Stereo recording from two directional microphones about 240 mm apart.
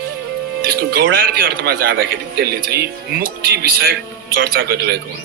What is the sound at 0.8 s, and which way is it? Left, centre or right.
A man's voice, right.